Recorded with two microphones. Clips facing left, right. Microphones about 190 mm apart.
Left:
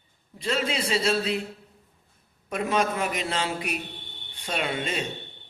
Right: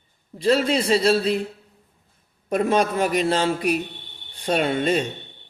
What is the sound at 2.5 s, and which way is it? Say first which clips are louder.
A man's voice: right 6 dB; 40° right (ahead or behind).